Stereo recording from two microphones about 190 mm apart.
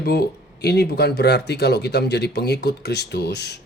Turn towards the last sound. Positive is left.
turn(degrees=60)  # may be behind; listen again after turning